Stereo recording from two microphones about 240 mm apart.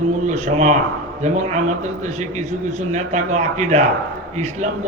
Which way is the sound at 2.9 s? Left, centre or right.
Right.